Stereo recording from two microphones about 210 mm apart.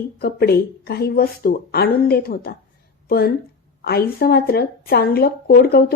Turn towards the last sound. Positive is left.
turn(degrees=45)  # may be behind; listen again after turning